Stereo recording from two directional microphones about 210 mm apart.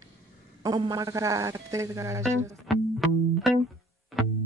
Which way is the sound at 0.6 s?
20° right (ahead or behind).